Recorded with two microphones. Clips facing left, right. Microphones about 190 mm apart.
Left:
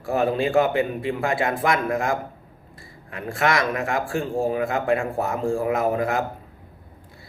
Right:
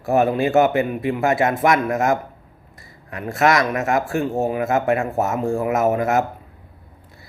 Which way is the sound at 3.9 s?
30° left (ahead or behind).